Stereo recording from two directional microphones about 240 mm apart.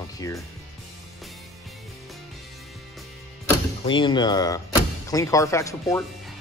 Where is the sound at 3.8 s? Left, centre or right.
Left.